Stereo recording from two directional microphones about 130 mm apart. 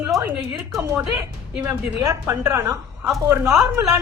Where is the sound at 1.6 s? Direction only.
20° right (ahead or behind).